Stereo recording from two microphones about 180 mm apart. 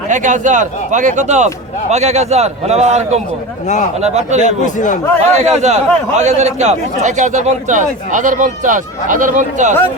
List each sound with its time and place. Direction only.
0.1 s a man's voice: 45° right (ahead or behind)
4.4 s a man's voice: 40° left (ahead or behind)
5.4 s a man's voice: 40° right (ahead or behind)